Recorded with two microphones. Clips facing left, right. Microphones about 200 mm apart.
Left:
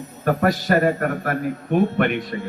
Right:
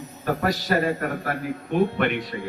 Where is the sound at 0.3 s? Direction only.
55° left (ahead or behind).